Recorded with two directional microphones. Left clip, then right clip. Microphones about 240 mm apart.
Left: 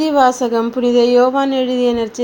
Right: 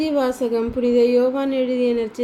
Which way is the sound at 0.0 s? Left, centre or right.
Centre.